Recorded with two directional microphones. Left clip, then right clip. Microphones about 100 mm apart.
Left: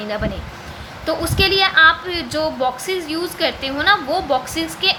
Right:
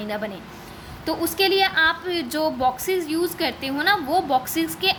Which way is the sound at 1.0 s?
30° right (ahead or behind).